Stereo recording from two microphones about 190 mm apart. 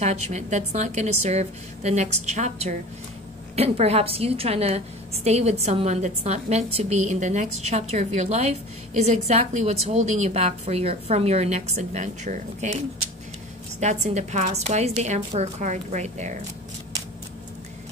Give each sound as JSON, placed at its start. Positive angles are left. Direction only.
{"t": 0.0, "sound": "a woman's voice", "side_deg": -35}
{"t": 13.7, "sound": "a woman's voice", "side_deg": -35}